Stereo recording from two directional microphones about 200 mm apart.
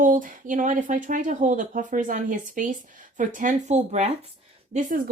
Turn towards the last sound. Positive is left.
turn(degrees=-45)  # may be behind; listen again after turning